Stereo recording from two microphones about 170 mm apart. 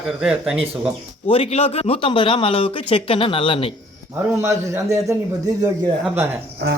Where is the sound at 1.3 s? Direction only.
35° left (ahead or behind).